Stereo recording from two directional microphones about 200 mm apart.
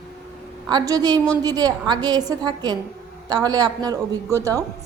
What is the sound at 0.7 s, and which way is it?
A woman's voice, 20° right (ahead or behind).